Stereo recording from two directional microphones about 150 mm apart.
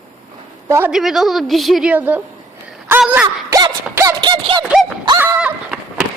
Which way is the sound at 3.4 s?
25° right (ahead or behind).